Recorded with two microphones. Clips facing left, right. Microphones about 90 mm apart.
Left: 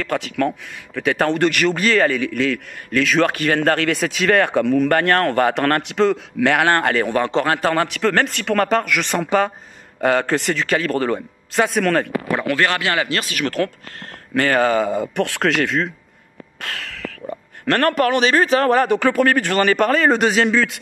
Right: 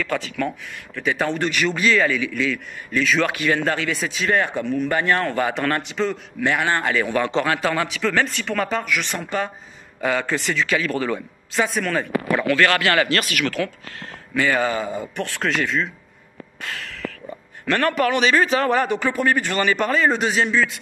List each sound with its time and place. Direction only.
0.0 s speech: 60° left (ahead or behind)
3.3 s speech: 50° left (ahead or behind)
7.1 s speech: 40° left (ahead or behind); by 9.5 s 85° left
9.9 s speech: 50° left (ahead or behind)
11.6 s speech: 65° left (ahead or behind)
12.3 s speech: 25° left (ahead or behind)
13.4 s speech: 45° left (ahead or behind)
14.3 s speech: 55° left (ahead or behind)
16.6 s a sound: 75° left (ahead or behind)
17.6 s speech: 50° left (ahead or behind)
18.9 s speech: 65° left (ahead or behind)